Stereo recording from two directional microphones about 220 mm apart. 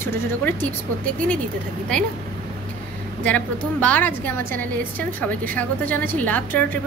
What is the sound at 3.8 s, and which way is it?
A woman's voice, 5° left (ahead or behind).